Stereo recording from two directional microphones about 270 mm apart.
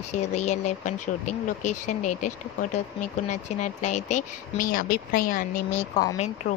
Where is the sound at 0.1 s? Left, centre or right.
Left.